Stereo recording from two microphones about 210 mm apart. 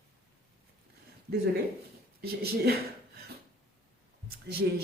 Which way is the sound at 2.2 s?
50° right (ahead or behind).